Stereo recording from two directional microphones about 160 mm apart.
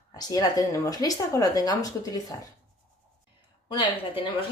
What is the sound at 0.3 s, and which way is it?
A woman's voice, 25° left (ahead or behind).